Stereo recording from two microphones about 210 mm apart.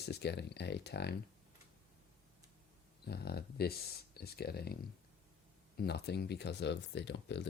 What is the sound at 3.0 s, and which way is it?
Speech, 50° left (ahead or behind).